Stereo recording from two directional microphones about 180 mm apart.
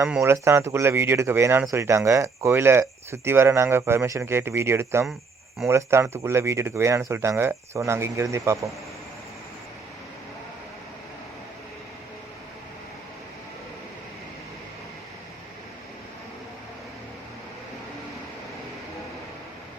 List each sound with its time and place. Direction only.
0.0 s speech: 15° right (ahead or behind)